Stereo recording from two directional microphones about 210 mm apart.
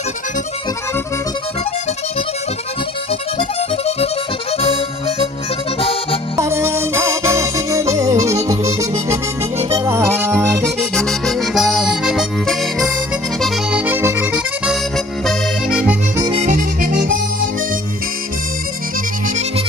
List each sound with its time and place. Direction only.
3.3 s accordion: 30° left (ahead or behind)
6.3 s music: 15° right (ahead or behind)
10.6 s accordion: 5° left (ahead or behind)
15.2 s music: 5° right (ahead or behind)
16.4 s harmonica: 40° right (ahead or behind)